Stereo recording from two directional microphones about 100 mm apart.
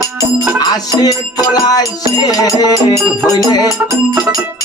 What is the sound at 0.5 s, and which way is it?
Music, 40° left (ahead or behind).